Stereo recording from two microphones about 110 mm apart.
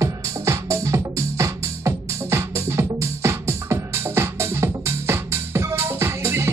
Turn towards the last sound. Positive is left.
turn(degrees=-25)  # may be behind; listen again after turning